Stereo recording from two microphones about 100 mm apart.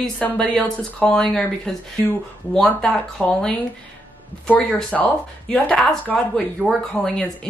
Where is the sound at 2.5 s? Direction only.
10° left (ahead or behind).